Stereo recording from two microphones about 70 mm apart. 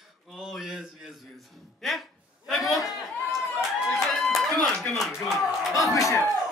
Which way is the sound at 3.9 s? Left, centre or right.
Centre.